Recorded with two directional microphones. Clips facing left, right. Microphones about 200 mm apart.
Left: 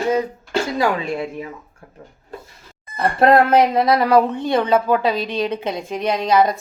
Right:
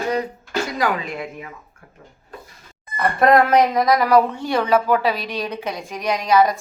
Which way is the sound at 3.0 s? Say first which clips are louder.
Left 1 dB; 30° left (ahead or behind).